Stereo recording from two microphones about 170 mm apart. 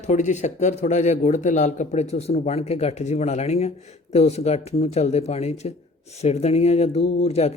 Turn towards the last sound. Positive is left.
turn(degrees=40)  # may be behind; listen again after turning